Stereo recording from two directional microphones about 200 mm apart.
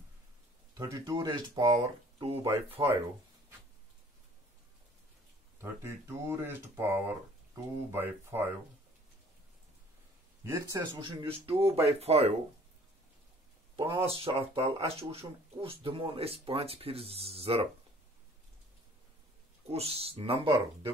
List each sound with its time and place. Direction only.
0.7 s speech: 15° right (ahead or behind)
5.6 s speech: 15° right (ahead or behind)
10.4 s speech: 15° right (ahead or behind); by 12.4 s 30° right (ahead or behind)
13.7 s speech: 25° right (ahead or behind)
19.7 s speech: 30° right (ahead or behind)